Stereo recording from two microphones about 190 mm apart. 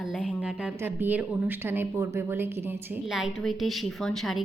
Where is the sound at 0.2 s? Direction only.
5° right (ahead or behind).